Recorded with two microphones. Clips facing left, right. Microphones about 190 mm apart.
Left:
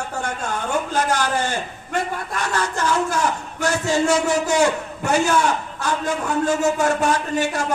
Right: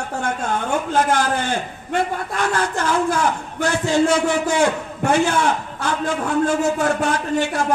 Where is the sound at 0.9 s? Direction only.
55° right (ahead or behind).